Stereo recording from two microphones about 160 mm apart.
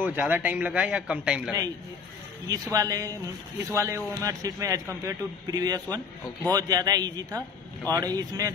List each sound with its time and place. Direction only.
0.0 s a man's voice: 10° right (ahead or behind)
2.5 s a man's voice: 20° right (ahead or behind)